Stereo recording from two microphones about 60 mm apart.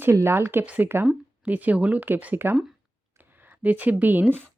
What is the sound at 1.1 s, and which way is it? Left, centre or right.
Speech, right.